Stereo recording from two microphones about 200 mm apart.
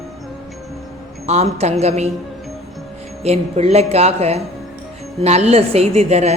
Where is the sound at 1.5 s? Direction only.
30° right (ahead or behind).